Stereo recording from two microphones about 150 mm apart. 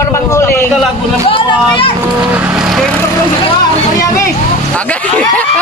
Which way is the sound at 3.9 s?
20° left (ahead or behind).